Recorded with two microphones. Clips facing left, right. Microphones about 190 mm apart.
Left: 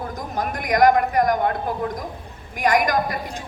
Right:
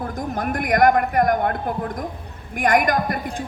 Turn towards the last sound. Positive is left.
turn(degrees=-55)  # may be behind; listen again after turning